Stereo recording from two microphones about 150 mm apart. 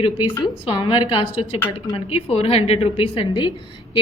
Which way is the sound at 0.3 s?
30° left (ahead or behind).